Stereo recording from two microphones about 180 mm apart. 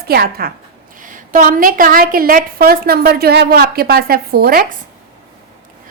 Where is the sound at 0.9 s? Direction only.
45° right (ahead or behind).